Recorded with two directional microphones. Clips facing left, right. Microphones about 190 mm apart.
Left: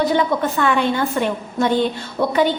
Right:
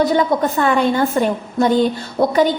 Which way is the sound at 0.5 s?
40° right (ahead or behind).